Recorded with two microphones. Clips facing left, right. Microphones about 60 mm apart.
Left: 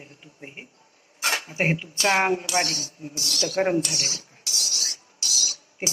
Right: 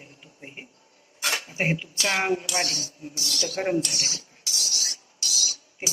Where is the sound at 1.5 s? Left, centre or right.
Left.